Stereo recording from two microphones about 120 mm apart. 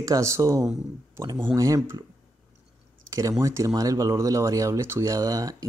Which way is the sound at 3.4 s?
25° right (ahead or behind).